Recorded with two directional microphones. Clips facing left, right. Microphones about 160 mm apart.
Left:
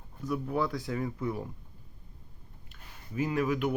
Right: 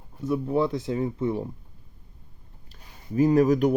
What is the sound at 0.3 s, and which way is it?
Speech, 25° right (ahead or behind).